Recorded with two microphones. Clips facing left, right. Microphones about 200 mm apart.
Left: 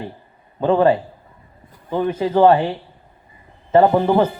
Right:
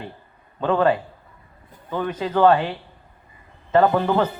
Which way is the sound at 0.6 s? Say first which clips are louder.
Left 4 dB; 20° left (ahead or behind).